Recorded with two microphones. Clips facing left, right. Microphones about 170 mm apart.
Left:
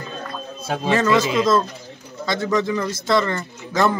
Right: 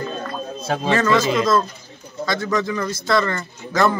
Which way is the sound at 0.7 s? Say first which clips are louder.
Even; 10° left (ahead or behind).